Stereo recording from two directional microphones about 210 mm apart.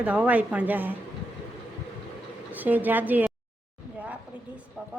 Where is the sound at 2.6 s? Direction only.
10° right (ahead or behind).